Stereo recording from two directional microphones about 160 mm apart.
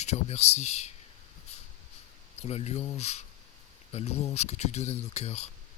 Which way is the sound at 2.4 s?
45° left (ahead or behind).